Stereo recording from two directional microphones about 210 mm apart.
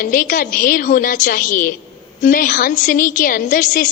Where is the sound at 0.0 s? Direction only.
40° left (ahead or behind).